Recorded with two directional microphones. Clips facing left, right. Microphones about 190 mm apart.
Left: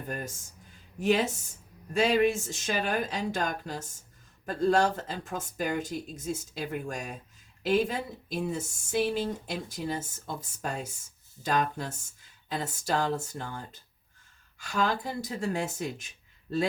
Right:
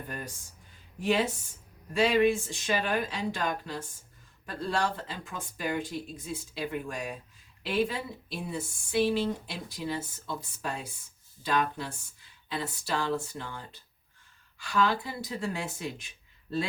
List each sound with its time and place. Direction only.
1.0 s speech: 45° left (ahead or behind)